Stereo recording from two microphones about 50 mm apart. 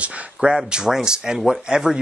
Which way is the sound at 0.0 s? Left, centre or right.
Centre.